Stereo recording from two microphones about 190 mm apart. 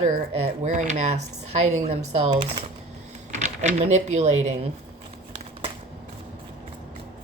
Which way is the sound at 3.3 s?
40° right (ahead or behind).